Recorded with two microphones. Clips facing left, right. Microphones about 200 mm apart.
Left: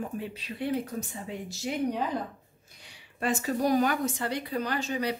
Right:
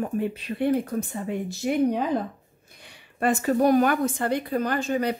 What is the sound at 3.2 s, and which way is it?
Speech, 55° right (ahead or behind).